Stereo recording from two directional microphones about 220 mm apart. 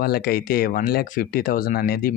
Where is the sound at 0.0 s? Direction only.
45° left (ahead or behind).